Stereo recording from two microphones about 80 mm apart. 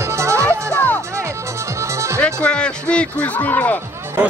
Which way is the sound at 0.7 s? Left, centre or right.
Left.